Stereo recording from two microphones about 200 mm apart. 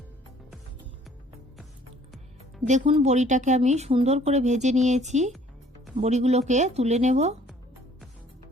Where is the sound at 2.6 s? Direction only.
30° right (ahead or behind).